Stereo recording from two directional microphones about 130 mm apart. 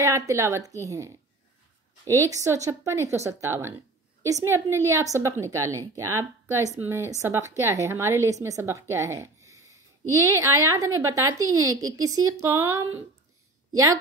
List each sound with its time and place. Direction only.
0.0 s a woman's voice: 25° right (ahead or behind)